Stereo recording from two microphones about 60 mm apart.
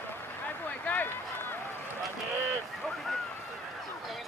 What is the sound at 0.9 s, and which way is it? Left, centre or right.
Run, left.